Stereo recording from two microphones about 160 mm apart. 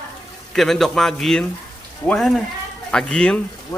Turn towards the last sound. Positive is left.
turn(degrees=5)  # may be behind; listen again after turning